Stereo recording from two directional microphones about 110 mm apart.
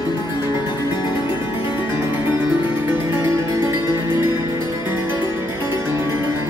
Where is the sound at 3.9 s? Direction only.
25° right (ahead or behind).